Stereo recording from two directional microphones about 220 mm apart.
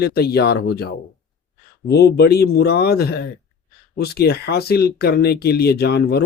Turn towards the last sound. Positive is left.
turn(degrees=50)  # may be behind; listen again after turning